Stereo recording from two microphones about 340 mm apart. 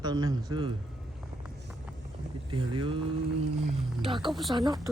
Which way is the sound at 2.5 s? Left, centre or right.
Centre.